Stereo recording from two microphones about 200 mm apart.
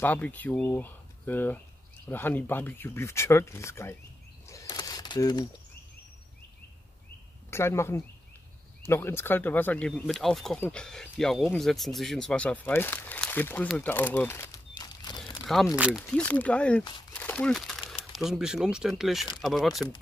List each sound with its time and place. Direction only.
0.0 s speech: 10° left (ahead or behind)
4.5 s a sound: 20° left (ahead or behind)
7.5 s speech: 15° left (ahead or behind)
13.7 s crumpling: 5° left (ahead or behind)
15.4 s speech: centre (ahead or behind)
17.1 s a sound: 10° left (ahead or behind)
18.1 s speech: centre (ahead or behind)